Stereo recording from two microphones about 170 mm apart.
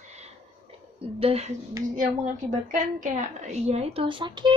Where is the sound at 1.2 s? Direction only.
40° right (ahead or behind).